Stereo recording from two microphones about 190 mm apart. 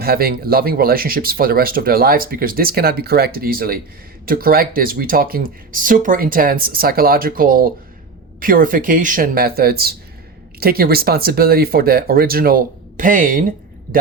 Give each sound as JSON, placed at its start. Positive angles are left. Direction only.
{"t": 0.0, "sound": "speech", "side_deg": -50}